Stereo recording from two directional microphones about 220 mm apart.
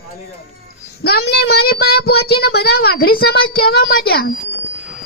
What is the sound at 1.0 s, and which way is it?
Speech, 45° left (ahead or behind).